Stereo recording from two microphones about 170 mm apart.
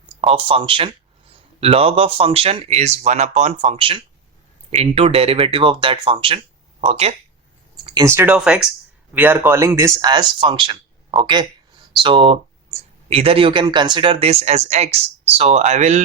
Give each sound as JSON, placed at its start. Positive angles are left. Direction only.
{"t": 0.2, "sound": "speech", "side_deg": -30}
{"t": 8.0, "sound": "speech", "side_deg": -15}